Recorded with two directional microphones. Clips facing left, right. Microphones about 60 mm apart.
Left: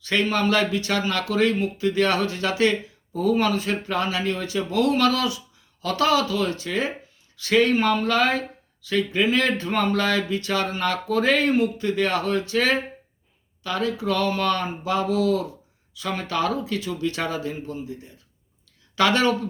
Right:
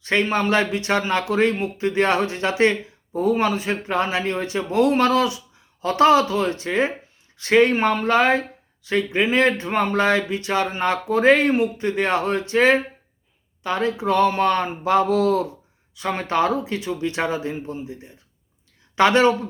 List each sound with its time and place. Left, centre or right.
0.0 s speech: right